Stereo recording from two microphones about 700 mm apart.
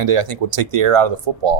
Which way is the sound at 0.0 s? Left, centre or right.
Right.